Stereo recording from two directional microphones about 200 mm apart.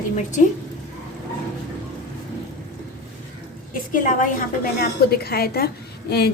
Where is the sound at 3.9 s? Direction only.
40° left (ahead or behind).